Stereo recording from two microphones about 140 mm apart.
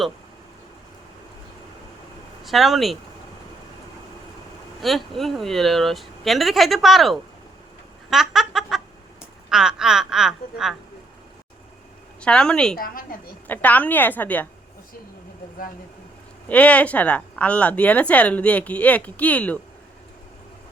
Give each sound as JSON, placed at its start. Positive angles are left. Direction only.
{"t": 2.4, "sound": "speech", "side_deg": 0}
{"t": 4.8, "sound": "speech", "side_deg": 0}
{"t": 8.1, "sound": "a sound", "side_deg": 0}
{"t": 9.5, "sound": "speech", "side_deg": -5}
{"t": 12.2, "sound": "speech", "side_deg": 5}
{"t": 12.7, "sound": "a woman's voice", "side_deg": 90}
{"t": 13.5, "sound": "a woman's voice", "side_deg": 10}
{"t": 16.5, "sound": "a woman's voice", "side_deg": 10}